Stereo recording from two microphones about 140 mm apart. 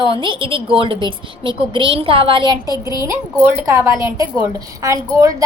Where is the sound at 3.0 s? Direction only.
20° right (ahead or behind).